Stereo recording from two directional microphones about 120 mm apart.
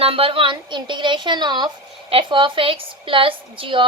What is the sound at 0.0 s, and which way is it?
A woman's voice, 50° right (ahead or behind).